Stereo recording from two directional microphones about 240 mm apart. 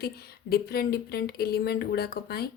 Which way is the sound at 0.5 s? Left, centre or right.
Left.